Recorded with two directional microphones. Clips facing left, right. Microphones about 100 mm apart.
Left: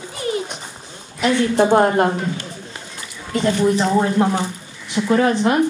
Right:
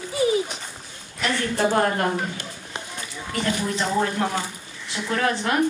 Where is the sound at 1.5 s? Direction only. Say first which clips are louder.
Left 6 dB; 25° left (ahead or behind).